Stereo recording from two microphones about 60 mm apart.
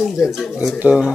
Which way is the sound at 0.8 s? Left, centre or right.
Right.